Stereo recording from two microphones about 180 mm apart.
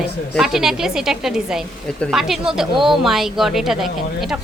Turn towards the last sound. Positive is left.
turn(degrees=0)  # may be behind; listen again after turning